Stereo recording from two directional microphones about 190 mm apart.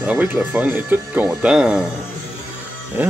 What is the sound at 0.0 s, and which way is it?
Speech, 5° right (ahead or behind).